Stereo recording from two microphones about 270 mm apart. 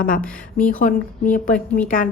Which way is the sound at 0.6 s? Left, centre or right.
Left.